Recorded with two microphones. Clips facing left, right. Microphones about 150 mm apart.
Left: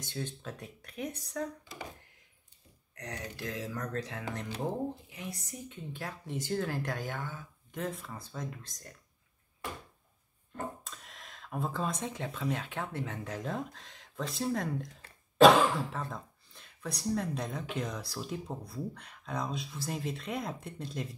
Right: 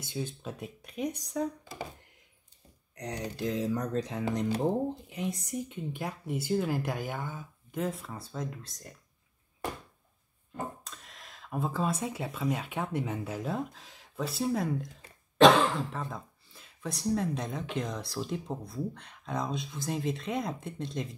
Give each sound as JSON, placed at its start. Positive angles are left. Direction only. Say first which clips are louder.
{"t": 0.0, "sound": "speech", "louder": "right 3 dB", "side_deg": -10}
{"t": 3.0, "sound": "speech", "louder": "right 6 dB", "side_deg": -20}
{"t": 10.5, "sound": "speech", "louder": "right 1 dB", "side_deg": 0}